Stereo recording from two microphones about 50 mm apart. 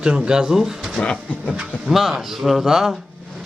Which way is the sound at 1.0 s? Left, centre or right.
Left.